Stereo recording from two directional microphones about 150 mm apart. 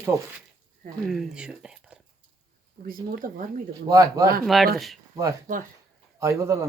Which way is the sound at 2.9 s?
70° right (ahead or behind).